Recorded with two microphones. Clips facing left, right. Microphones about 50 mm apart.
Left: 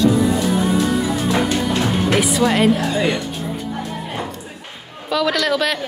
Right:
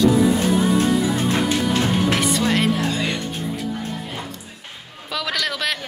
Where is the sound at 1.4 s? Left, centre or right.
Centre.